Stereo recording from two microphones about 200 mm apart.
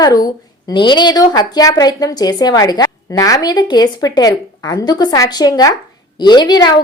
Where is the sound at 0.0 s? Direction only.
20° left (ahead or behind).